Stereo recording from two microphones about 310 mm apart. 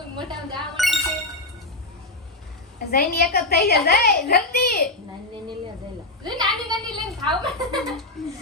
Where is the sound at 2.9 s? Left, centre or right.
Left.